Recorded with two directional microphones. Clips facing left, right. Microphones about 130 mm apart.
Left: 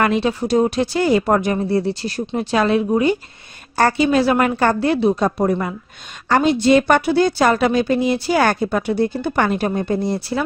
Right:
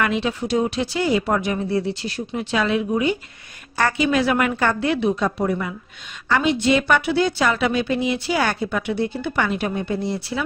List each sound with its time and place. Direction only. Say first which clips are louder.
0.0 s a woman's voice: left 4 dB; 40° left (ahead or behind)